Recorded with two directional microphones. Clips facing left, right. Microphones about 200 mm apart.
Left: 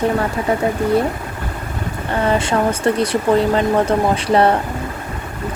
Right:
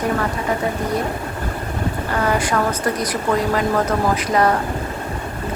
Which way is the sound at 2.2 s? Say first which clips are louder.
Left 3 dB; 25° left (ahead or behind).